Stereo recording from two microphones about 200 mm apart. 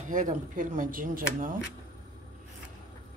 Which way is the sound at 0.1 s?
40° right (ahead or behind).